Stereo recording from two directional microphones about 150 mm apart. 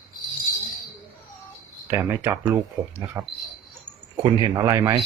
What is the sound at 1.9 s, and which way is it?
Speech, 20° right (ahead or behind).